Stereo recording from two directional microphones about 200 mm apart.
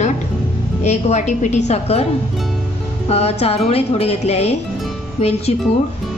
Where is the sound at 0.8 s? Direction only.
35° left (ahead or behind).